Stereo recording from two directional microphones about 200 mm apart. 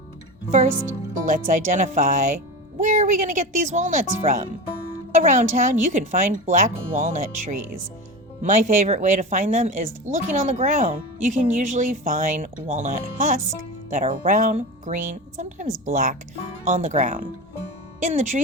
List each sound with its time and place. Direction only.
1.2 s speech: 40° right (ahead or behind)